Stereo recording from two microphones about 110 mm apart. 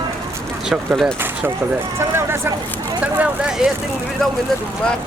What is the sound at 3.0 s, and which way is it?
Vehicle, 15° right (ahead or behind).